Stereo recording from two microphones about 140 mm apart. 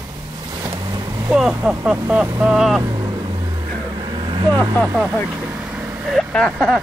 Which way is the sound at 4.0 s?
35° right (ahead or behind).